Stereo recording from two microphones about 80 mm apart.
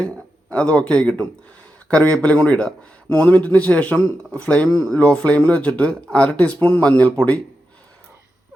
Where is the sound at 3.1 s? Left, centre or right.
Left.